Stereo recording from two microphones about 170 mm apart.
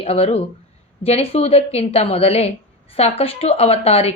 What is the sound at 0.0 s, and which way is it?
A woman's voice, 35° left (ahead or behind).